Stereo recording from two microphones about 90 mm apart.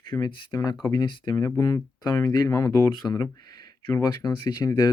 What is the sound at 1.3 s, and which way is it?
Speech, 35° left (ahead or behind).